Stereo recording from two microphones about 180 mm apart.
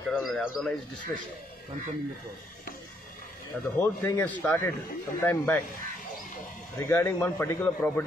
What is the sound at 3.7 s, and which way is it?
A man's voice, 15° left (ahead or behind).